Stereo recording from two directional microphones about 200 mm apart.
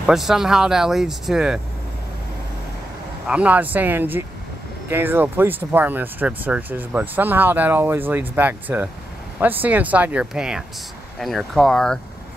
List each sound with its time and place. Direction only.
0.0 s speech: centre (ahead or behind)
3.3 s speech: 5° right (ahead or behind)